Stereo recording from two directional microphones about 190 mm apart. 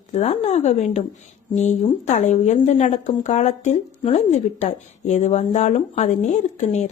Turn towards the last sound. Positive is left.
turn(degrees=35)  # may be behind; listen again after turning